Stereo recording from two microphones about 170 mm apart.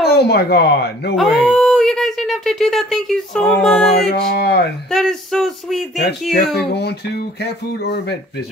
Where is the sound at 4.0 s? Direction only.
85° left.